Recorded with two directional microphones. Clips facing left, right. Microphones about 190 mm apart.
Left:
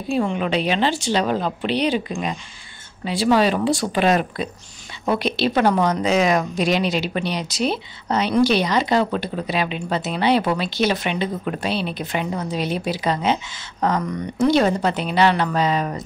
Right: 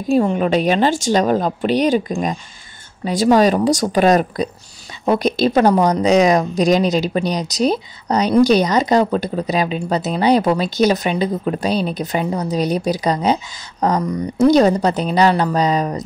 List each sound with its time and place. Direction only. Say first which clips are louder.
0.1 s a woman's voice: right 6 dB; 40° right (ahead or behind)